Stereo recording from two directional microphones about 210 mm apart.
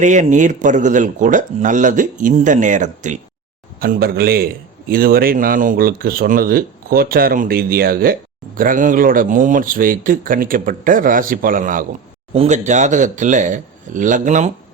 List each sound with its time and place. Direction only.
0.0 s a man's voice: 35° right (ahead or behind)